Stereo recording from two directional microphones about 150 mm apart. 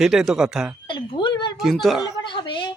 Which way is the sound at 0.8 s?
30° left (ahead or behind).